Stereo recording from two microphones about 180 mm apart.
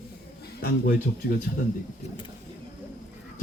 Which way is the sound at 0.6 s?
55° left (ahead or behind).